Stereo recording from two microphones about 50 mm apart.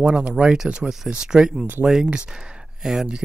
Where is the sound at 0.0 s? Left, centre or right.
Centre.